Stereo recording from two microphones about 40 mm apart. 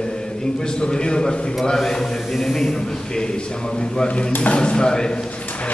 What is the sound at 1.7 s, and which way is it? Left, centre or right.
Speech, centre.